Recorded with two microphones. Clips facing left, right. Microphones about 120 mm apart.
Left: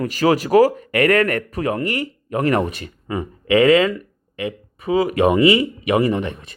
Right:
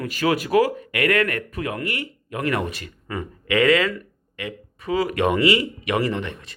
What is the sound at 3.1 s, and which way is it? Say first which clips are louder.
Speech: left 7 dB; 20° left (ahead or behind).